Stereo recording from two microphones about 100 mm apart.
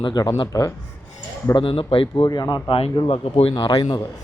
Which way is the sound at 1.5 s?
60° left (ahead or behind).